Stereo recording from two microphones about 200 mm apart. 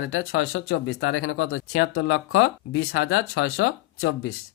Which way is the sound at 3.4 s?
70° left (ahead or behind).